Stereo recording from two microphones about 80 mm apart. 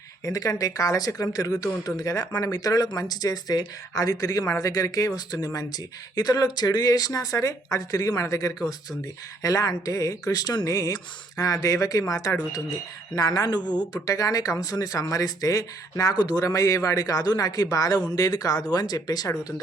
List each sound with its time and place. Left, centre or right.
0.3 s speech: left